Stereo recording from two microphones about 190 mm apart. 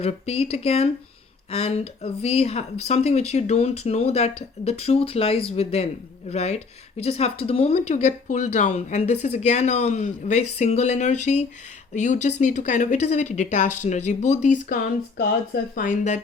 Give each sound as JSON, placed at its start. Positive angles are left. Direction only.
{"t": 0.0, "sound": "speech", "side_deg": 30}